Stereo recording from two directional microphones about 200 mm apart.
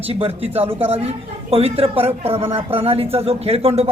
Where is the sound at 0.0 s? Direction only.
30° right (ahead or behind).